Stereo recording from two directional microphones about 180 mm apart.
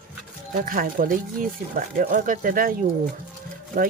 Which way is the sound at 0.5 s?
50° right (ahead or behind).